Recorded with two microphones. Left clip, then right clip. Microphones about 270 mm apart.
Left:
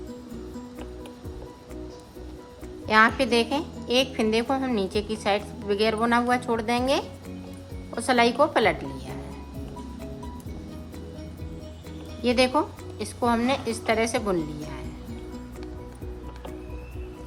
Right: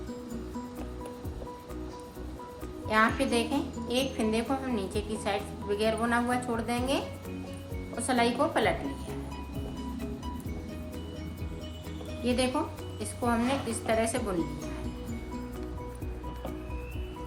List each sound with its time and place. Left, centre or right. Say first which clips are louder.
2.8 s a woman's voice: left 6 dB; centre
12.2 s a woman's voice: left 7 dB; centre